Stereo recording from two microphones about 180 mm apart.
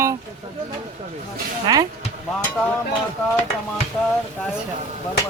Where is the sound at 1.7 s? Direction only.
20° right (ahead or behind).